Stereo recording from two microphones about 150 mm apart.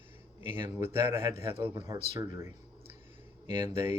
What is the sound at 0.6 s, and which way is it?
Speech, 15° right (ahead or behind).